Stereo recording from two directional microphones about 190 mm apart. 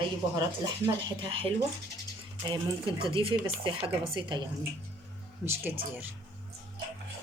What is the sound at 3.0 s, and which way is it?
Speech, 25° right (ahead or behind).